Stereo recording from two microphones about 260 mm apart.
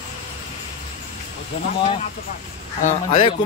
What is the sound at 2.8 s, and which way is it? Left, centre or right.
Speech, left.